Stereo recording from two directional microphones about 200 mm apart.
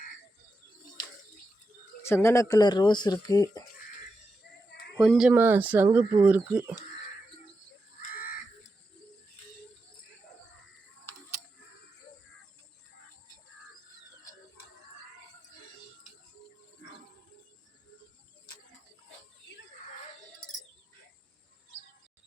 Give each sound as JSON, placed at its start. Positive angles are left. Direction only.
{"t": 2.0, "sound": "speech", "side_deg": 15}
{"t": 4.9, "sound": "speech", "side_deg": 0}